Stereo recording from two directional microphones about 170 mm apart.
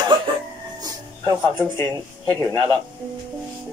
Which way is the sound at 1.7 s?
15° left (ahead or behind).